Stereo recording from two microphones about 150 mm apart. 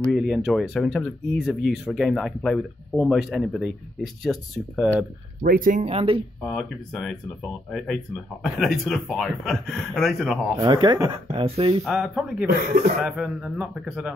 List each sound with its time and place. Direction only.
0.0 s speech: centre (ahead or behind)
5.4 s speech: 70° right (ahead or behind)
5.9 s speech: 40° right (ahead or behind)
6.4 s speech: 5° left (ahead or behind)
10.5 s speech: 25° right (ahead or behind)
11.8 s speech: centre (ahead or behind)
12.4 s speech: 80° right
13.0 s speech: 5° right (ahead or behind)